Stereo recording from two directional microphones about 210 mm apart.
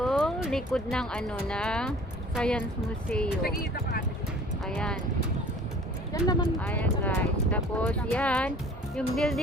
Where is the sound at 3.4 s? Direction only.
45° left (ahead or behind).